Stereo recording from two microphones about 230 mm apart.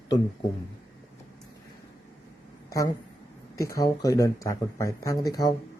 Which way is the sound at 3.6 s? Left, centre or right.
Centre.